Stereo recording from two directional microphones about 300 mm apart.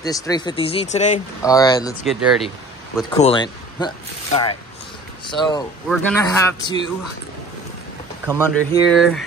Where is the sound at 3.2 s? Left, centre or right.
Centre.